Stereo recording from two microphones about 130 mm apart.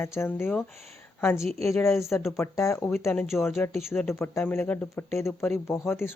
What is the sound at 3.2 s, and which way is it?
Speech, 5° right (ahead or behind).